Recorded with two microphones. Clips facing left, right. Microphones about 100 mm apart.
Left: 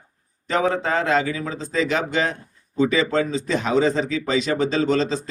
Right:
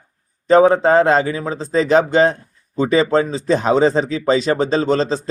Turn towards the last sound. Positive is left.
turn(degrees=-35)  # may be behind; listen again after turning